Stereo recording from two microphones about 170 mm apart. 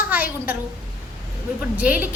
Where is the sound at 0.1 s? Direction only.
10° right (ahead or behind).